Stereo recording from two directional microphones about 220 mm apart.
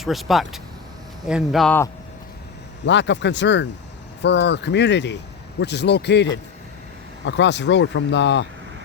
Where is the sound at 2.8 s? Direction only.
55° left (ahead or behind).